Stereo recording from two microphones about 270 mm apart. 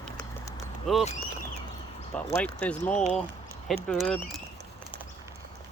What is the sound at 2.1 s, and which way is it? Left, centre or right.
Speech, centre.